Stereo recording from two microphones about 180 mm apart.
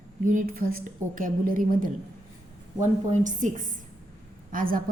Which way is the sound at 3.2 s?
45° right (ahead or behind).